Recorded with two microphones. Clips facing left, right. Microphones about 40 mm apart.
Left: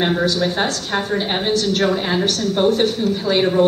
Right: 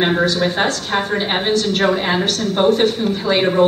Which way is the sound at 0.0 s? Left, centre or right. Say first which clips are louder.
Right 2 dB; right.